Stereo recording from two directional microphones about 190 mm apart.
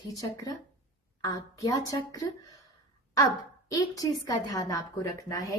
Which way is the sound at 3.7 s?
20° left (ahead or behind).